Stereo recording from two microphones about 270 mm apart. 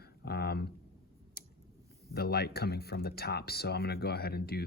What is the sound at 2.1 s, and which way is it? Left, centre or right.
Speech, left.